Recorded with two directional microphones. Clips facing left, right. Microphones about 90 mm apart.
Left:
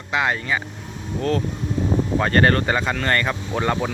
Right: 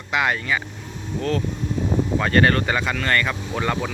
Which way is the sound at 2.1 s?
35° left (ahead or behind).